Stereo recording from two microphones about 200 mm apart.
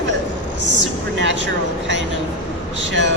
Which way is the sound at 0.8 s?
65° right (ahead or behind).